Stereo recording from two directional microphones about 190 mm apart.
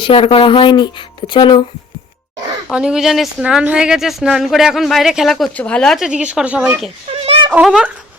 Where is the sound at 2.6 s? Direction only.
5° right (ahead or behind).